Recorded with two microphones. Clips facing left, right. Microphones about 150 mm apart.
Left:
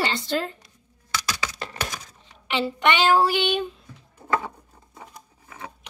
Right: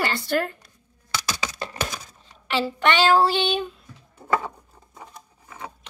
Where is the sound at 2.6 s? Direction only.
15° left (ahead or behind).